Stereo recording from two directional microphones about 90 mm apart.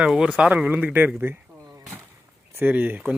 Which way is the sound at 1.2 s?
25° right (ahead or behind).